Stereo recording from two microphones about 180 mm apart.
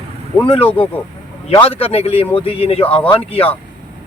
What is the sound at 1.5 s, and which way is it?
Speech, 30° left (ahead or behind).